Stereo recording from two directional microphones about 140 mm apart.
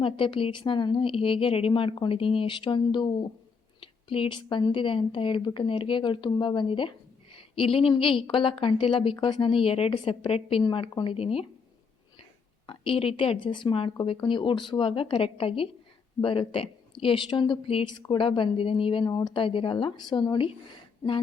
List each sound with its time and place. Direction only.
0.0 s a woman's voice: 40° left (ahead or behind)
12.6 s a woman's voice: 40° left (ahead or behind)